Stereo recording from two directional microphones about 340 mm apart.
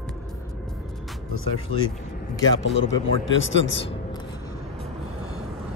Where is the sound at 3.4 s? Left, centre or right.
Left.